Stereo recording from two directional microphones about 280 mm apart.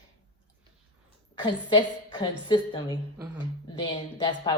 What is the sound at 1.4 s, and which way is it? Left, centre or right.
A woman's voice, centre.